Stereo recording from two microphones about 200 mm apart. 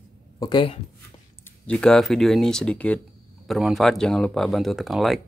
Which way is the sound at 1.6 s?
5° left (ahead or behind).